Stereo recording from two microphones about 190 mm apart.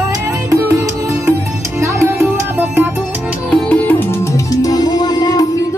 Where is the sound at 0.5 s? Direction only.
15° right (ahead or behind).